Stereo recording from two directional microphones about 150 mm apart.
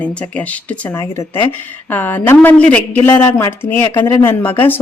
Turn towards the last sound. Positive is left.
turn(degrees=15)  # may be behind; listen again after turning